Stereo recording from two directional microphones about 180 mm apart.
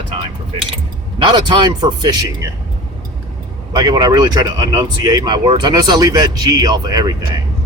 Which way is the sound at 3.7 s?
25° right (ahead or behind).